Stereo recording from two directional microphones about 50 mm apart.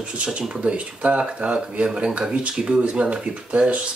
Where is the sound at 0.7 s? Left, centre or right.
Right.